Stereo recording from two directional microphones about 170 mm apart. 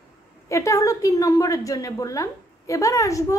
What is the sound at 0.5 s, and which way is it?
A woman's voice, 20° left (ahead or behind).